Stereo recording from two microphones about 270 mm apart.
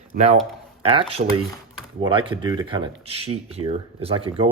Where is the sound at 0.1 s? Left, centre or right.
Right.